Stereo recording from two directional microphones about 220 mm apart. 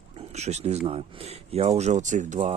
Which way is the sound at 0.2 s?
30° right (ahead or behind).